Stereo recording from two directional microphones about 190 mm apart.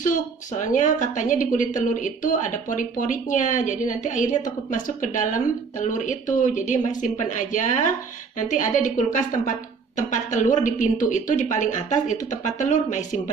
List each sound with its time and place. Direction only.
0.0 s a woman's voice: 40° left (ahead or behind)